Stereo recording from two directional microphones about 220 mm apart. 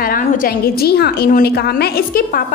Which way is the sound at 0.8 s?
45° left (ahead or behind).